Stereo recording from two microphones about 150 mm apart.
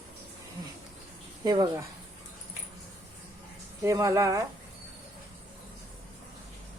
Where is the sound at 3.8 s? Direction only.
20° right (ahead or behind).